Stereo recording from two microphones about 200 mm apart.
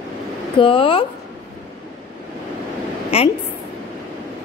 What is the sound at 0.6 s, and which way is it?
Speech, 25° left (ahead or behind).